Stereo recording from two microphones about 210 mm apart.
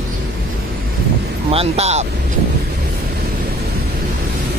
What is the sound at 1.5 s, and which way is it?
Speech, 30° right (ahead or behind).